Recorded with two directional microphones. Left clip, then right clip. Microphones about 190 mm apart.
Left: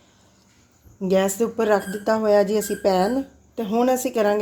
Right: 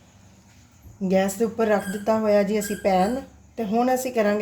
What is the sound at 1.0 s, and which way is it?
A woman's voice, 35° left (ahead or behind).